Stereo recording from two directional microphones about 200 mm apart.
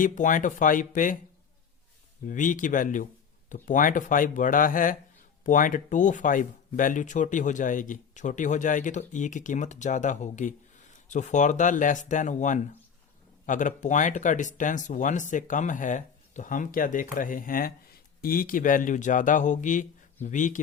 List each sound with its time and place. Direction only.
0.0 s speech: 40° left (ahead or behind)
2.2 s speech: 40° left (ahead or behind)